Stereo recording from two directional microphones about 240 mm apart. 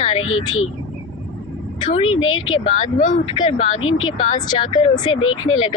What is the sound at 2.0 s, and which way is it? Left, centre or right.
Speech, left.